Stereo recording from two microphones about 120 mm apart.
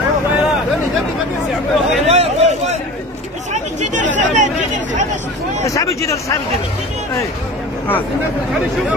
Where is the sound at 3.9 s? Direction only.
90° right.